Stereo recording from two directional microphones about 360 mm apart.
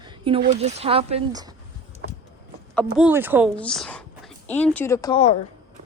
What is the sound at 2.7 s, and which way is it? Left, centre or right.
A woman's voice, centre.